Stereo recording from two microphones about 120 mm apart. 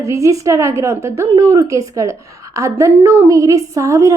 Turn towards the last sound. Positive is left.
turn(degrees=-25)  # may be behind; listen again after turning